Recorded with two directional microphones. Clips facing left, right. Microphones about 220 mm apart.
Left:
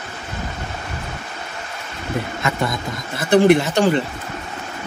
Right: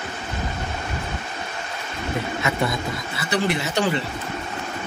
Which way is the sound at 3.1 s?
50° left (ahead or behind).